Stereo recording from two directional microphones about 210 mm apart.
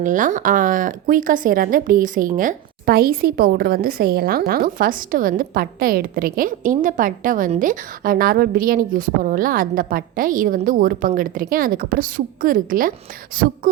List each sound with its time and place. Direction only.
0.0 s speech: 40° right (ahead or behind)